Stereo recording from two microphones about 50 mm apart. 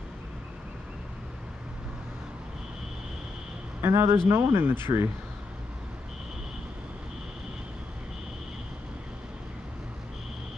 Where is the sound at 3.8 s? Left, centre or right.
Right.